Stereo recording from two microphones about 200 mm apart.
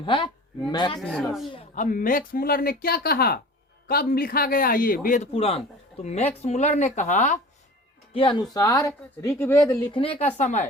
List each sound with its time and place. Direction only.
0.0 s speech: 25° left (ahead or behind)
0.9 s speech: centre (ahead or behind)
1.7 s speech: 40° left (ahead or behind)
5.3 s speech: 30° left (ahead or behind)
8.1 s speech: 25° left (ahead or behind)
9.9 s speech: 25° left (ahead or behind)